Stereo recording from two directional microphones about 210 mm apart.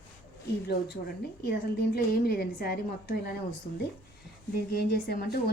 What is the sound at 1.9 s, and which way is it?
Speech, 45° left (ahead or behind).